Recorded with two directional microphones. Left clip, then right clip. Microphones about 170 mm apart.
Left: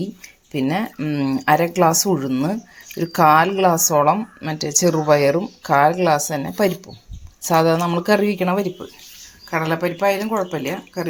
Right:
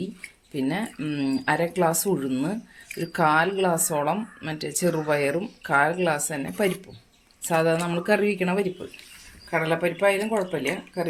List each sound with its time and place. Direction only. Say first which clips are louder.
0.5 s speech: left 6 dB; 40° left (ahead or behind)
9.5 s speech: left 3 dB; 45° left (ahead or behind)